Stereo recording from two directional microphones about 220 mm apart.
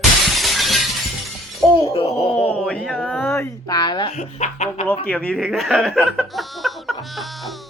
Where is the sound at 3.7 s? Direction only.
20° left (ahead or behind).